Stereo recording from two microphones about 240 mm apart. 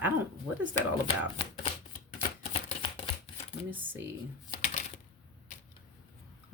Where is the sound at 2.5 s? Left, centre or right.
Left.